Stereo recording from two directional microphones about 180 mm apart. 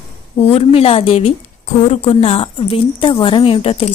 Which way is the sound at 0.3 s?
35° left (ahead or behind).